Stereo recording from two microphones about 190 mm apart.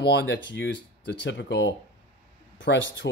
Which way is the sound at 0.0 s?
65° left (ahead or behind).